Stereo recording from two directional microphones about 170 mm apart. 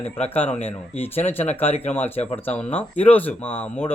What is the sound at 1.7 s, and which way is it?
Speech, 35° left (ahead or behind).